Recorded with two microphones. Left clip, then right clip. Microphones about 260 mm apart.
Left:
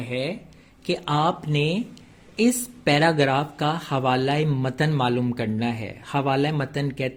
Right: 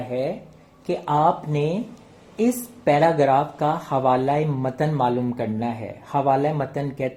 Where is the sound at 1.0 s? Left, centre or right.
Left.